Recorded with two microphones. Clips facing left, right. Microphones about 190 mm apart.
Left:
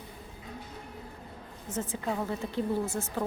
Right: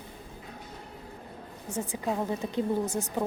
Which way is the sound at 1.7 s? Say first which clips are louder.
Right 1 dB; 15° right (ahead or behind).